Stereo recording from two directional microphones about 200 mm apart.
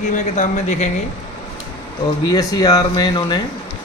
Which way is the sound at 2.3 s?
20° left (ahead or behind).